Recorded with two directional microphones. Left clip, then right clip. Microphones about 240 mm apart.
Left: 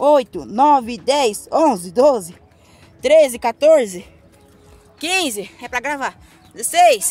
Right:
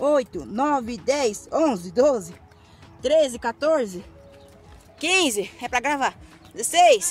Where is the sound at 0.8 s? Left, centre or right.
Left.